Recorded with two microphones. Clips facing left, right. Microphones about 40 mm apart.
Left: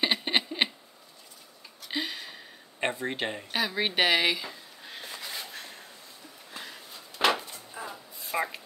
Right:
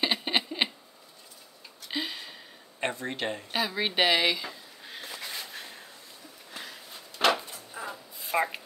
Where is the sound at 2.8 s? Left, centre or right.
Centre.